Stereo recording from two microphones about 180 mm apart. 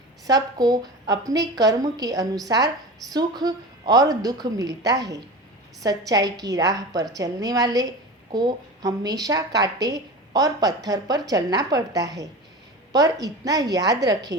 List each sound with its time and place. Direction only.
0.3 s a woman's voice: 20° right (ahead or behind)